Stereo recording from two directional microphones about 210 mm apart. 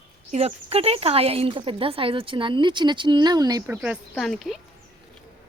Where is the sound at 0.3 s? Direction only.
30° right (ahead or behind).